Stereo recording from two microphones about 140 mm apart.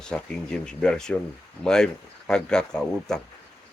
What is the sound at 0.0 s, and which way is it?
Speech, 5° left (ahead or behind).